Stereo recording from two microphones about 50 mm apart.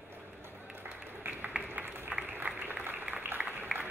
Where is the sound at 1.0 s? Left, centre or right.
Right.